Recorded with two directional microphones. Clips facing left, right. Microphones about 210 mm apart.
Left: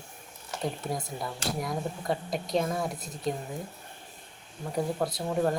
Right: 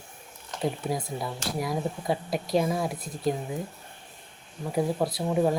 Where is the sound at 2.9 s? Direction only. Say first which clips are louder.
Right 3 dB; 20° left (ahead or behind).